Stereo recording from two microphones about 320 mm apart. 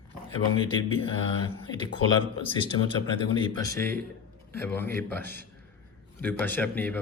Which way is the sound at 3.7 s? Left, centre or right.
Right.